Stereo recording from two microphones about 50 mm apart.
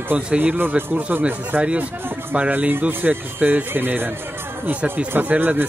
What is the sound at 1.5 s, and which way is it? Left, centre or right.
Speech, right.